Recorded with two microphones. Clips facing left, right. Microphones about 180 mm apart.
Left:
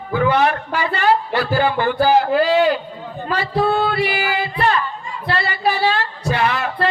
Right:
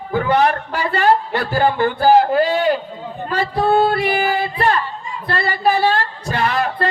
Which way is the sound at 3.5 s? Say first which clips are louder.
Right 2 dB; 50° right (ahead or behind).